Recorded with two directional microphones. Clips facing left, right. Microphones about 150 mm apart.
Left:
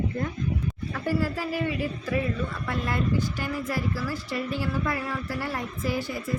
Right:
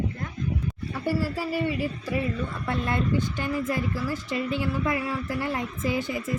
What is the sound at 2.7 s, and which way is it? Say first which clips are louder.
A woman's voice: right 2 dB; 25° right (ahead or behind).